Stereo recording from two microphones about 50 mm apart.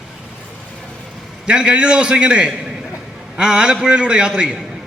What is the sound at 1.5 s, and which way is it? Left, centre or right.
A man's voice, right.